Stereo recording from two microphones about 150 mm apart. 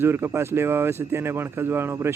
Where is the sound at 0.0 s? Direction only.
15° right (ahead or behind).